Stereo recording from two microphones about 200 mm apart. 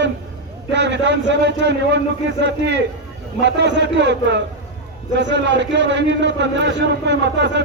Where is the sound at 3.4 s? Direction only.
60° right (ahead or behind).